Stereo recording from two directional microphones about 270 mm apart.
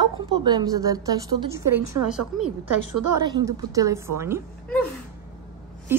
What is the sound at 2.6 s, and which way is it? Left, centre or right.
Speech, right.